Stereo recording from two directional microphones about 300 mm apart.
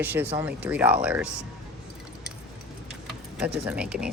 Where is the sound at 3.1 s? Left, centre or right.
Centre.